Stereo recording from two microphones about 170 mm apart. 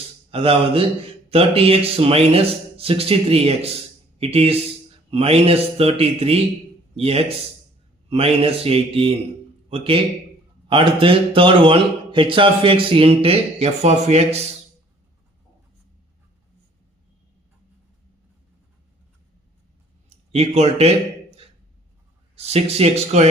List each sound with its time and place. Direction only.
0.3 s a man's voice: 35° right (ahead or behind)
20.1 s a sound: 35° right (ahead or behind)
22.4 s a man's voice: 35° right (ahead or behind)